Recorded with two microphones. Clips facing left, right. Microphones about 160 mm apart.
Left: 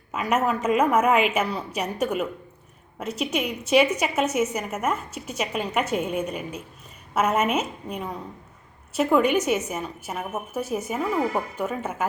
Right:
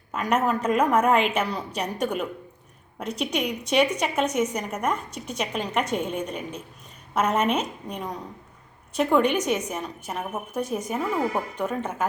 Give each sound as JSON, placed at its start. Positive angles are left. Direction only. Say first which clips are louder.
{"t": 0.1, "sound": "a woman's voice", "louder": "even", "side_deg": 5}